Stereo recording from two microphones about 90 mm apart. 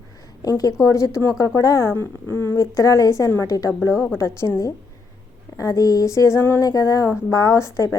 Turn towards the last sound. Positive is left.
turn(degrees=35)  # may be behind; listen again after turning